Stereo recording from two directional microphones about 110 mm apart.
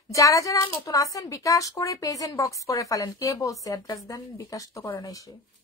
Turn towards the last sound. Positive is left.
turn(degrees=30)  # may be behind; listen again after turning